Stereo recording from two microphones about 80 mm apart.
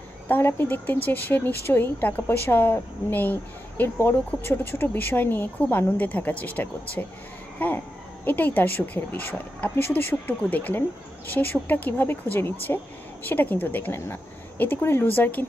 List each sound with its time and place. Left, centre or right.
0.3 s speech: left
7.5 s a sound: left
8.3 s speech: left